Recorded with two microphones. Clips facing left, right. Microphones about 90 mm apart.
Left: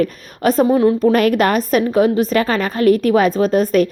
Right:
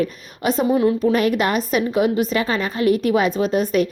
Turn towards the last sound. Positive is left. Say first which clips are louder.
# left 4 dB
turn(degrees=40)  # may be behind; listen again after turning